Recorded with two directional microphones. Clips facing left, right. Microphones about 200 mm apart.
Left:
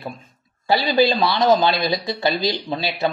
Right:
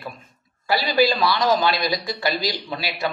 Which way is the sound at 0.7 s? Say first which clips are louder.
Left 2 dB; 25° left (ahead or behind).